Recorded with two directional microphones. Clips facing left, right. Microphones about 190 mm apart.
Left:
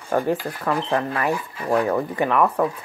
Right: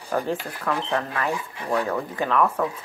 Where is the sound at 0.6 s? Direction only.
15° left (ahead or behind).